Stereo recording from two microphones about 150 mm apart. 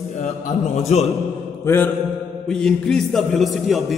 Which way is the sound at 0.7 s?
45° left (ahead or behind).